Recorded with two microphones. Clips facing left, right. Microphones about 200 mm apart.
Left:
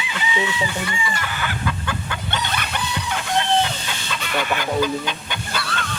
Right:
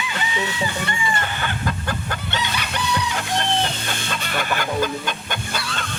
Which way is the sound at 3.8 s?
50° right (ahead or behind).